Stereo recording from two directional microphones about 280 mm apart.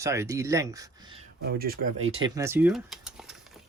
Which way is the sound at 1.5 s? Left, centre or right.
Right.